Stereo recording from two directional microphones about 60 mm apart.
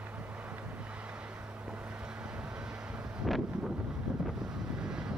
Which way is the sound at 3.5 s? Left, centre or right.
Centre.